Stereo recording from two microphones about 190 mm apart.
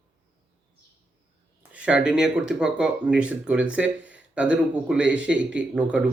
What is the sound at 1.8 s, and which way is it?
A man's voice, 5° right (ahead or behind).